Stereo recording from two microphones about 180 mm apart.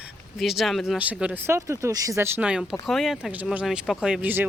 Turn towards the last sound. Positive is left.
turn(degrees=-10)  # may be behind; listen again after turning